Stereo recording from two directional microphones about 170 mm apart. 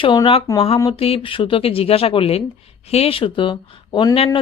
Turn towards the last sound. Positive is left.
turn(degrees=30)  # may be behind; listen again after turning